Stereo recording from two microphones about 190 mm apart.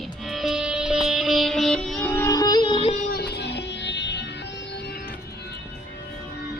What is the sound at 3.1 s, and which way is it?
Music, 55° left (ahead or behind).